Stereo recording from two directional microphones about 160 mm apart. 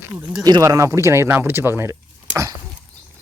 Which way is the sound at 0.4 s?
25° right (ahead or behind).